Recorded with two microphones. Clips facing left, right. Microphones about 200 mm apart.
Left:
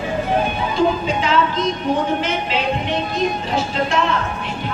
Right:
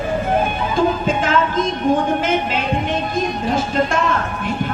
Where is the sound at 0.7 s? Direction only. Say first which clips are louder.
Right 1 dB; 50° right (ahead or behind).